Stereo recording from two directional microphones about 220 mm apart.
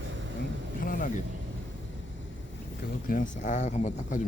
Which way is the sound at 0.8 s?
35° left (ahead or behind).